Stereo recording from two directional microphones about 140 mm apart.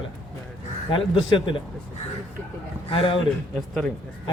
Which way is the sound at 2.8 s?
40° left (ahead or behind).